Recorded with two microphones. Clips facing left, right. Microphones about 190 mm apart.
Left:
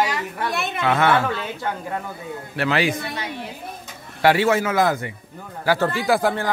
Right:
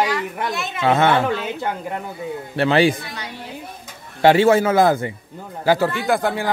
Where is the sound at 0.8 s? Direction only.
25° right (ahead or behind).